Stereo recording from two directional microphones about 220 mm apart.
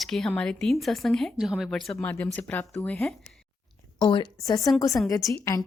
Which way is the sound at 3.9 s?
20° left (ahead or behind).